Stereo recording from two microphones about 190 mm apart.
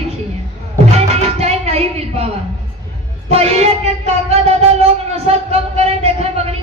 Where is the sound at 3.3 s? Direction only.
35° right (ahead or behind).